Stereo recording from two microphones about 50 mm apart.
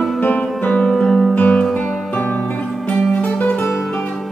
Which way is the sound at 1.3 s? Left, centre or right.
Left.